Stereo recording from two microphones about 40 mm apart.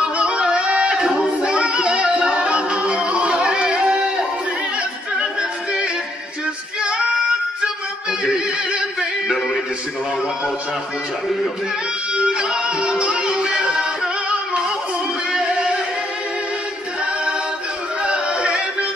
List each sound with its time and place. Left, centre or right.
0.0 s a sound: right
1.6 s music: right
6.8 s female singing: right
7.6 s opera: right
12.1 s music: right
17.0 s choir: right
18.0 s music: right